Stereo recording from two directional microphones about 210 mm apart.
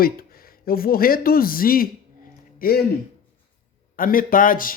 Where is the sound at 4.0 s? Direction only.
40° left (ahead or behind).